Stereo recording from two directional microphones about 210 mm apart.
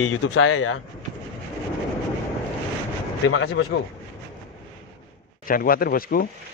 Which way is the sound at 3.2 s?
70° left (ahead or behind).